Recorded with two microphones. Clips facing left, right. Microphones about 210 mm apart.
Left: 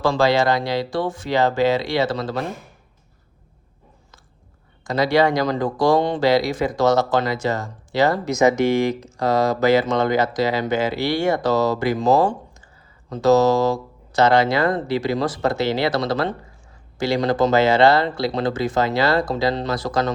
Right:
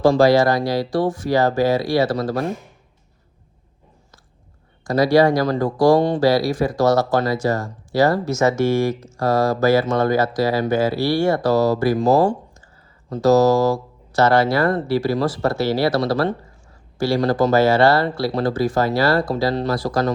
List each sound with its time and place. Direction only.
0.2 s speech: 25° left (ahead or behind)
4.8 s speech: 20° left (ahead or behind)
12.2 s computer keyboard: 20° left (ahead or behind)
13.2 s speech: 20° left (ahead or behind)